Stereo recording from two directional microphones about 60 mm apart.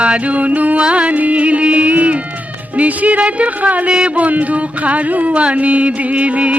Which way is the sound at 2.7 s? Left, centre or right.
Right.